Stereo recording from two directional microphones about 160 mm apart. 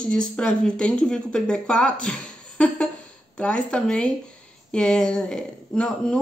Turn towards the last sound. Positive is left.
turn(degrees=5)  # may be behind; listen again after turning